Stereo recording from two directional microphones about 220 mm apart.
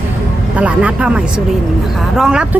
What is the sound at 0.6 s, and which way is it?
Speech, 5° right (ahead or behind).